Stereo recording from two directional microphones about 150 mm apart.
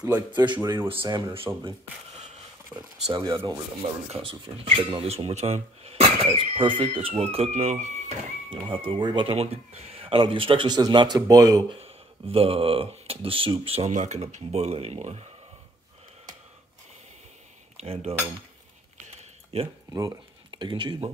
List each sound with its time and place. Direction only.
0.0 s speech: 25° right (ahead or behind)
2.7 s speech: 30° right (ahead or behind)
4.1 s speech: 40° right (ahead or behind)
8.5 s speech: 35° right (ahead or behind)
11.8 s speech: 40° right (ahead or behind)
17.7 s cutlery: 40° right (ahead or behind)
19.5 s speech: 45° right (ahead or behind)
19.9 s speech: 25° right (ahead or behind)